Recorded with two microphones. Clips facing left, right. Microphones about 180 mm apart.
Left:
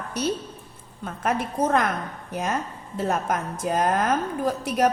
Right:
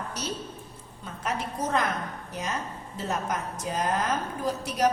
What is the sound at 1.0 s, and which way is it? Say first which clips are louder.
A woman's voice: left 6 dB; 55° left (ahead or behind).